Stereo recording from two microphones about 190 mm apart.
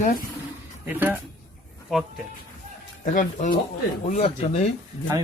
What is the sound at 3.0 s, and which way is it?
Speech, 40° left (ahead or behind).